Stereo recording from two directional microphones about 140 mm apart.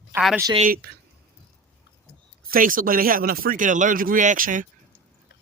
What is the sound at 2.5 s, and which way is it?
Speech, 80° right.